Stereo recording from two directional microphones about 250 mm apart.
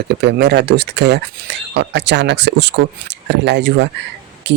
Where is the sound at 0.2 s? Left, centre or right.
Right.